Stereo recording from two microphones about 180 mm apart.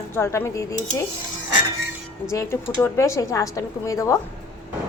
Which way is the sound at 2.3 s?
15° left (ahead or behind).